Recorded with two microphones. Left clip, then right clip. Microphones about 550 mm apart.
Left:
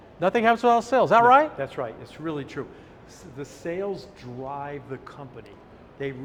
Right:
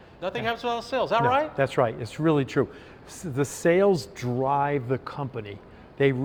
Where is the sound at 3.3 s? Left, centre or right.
Right.